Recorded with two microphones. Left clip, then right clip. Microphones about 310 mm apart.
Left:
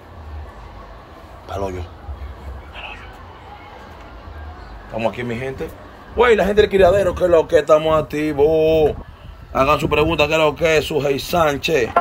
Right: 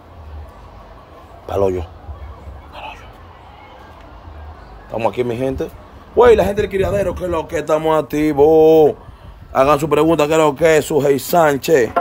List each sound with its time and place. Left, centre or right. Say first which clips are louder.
1.4 s a man's voice: right 8 dB; right
2.7 s music: right 2 dB; centre
4.9 s a man's voice: right 4 dB; right
6.7 s speech: left 4 dB; centre
7.6 s a man's voice: left 1 dB; centre